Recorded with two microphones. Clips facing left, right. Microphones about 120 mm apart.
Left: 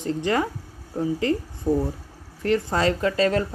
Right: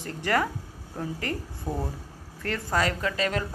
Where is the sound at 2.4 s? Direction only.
25° left (ahead or behind).